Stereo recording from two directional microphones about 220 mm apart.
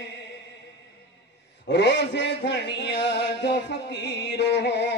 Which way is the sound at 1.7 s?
50° left (ahead or behind).